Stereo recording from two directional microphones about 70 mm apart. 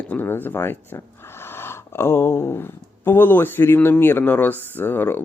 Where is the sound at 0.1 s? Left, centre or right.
Left.